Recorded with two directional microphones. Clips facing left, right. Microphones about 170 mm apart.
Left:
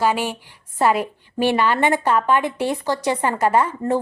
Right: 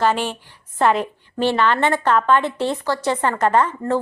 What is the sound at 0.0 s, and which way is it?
A woman's voice, 10° left (ahead or behind).